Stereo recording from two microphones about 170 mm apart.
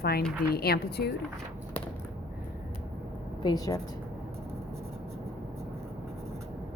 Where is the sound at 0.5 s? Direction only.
65° left (ahead or behind).